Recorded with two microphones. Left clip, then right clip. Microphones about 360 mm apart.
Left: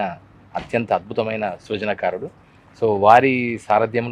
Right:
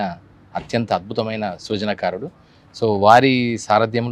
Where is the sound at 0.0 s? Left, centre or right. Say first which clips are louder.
Even; right.